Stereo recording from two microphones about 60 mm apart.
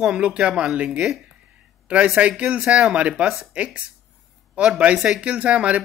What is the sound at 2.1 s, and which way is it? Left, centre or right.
Speech, right.